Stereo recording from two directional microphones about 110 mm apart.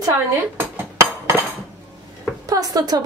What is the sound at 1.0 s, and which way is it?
Dishes, 25° right (ahead or behind).